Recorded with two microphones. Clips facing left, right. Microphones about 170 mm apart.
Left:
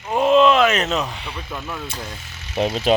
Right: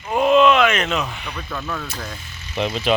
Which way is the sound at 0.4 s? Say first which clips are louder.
Even; 35° left (ahead or behind).